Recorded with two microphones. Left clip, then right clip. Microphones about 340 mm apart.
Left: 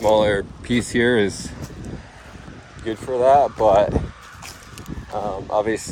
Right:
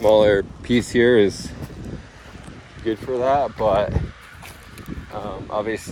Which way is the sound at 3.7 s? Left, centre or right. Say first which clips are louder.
Left 3 dB; centre.